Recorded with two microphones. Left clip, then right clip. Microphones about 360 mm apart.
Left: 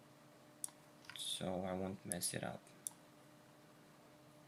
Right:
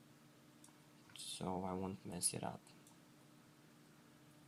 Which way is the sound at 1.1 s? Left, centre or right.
Centre.